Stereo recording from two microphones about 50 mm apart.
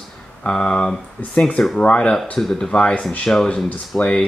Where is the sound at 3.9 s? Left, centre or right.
Left.